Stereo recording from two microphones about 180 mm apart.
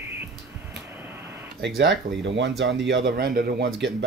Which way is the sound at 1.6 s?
75° right (ahead or behind).